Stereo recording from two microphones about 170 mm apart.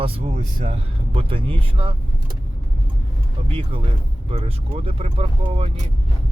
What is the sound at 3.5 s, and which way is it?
Speech, 30° right (ahead or behind).